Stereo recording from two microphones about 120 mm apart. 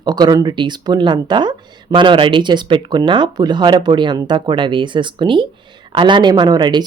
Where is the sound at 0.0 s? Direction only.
35° right (ahead or behind).